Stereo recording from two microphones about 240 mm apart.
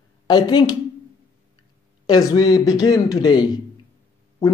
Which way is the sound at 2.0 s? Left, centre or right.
Centre.